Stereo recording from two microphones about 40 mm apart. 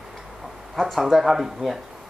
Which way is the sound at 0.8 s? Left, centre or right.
Centre.